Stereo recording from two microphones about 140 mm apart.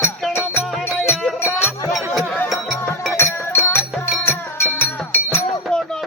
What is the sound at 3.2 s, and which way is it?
Music, 15° left (ahead or behind).